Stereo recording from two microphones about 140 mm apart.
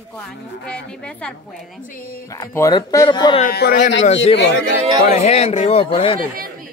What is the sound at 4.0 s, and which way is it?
A man's voice, 50° left (ahead or behind).